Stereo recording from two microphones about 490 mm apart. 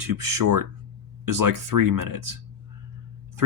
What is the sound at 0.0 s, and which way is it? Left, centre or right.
Speech, right.